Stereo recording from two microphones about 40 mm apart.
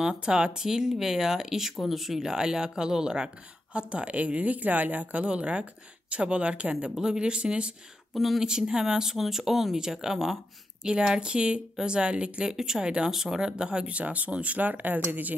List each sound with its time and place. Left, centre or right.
0.0 s speech: right
3.7 s speech: right
5.2 s speech: right
8.1 s speech: centre
8.5 s speech: centre
9.8 s speech: centre
10.1 s speech: centre
10.8 s a woman's voice: right
12.4 s speech: centre
13.8 s speech: right